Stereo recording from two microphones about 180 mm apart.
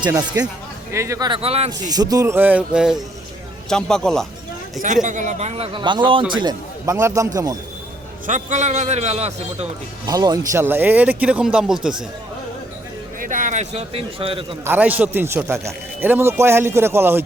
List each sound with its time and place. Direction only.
0.0 s a man's voice: 20° right (ahead or behind)
1.8 s a man's voice: 20° right (ahead or behind); by 4.3 s 5° left (ahead or behind)
5.0 s a man's voice: 45° right (ahead or behind); by 7.3 s 20° right (ahead or behind)
8.3 s a man's voice: 40° right (ahead or behind)
10.1 s a man's voice: 20° right (ahead or behind); by 12.0 s 5° right (ahead or behind)
13.1 s a man's voice: 45° right (ahead or behind); by 14.4 s 30° right (ahead or behind)
14.6 s a man's voice: 10° right (ahead or behind)